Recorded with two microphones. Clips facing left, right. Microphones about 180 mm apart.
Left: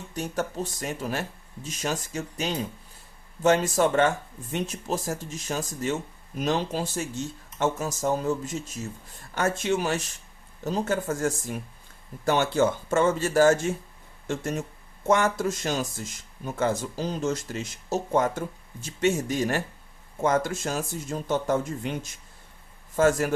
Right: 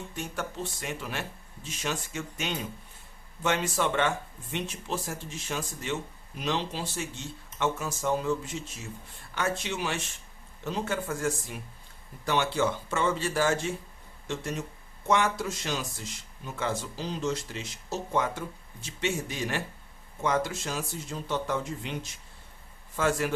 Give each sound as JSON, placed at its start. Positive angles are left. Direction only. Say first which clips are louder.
{"t": 0.1, "sound": "speech", "louder": "left 9 dB", "side_deg": 40}